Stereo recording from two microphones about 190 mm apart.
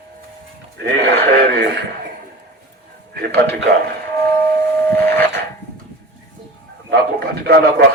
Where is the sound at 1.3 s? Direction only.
60° right (ahead or behind).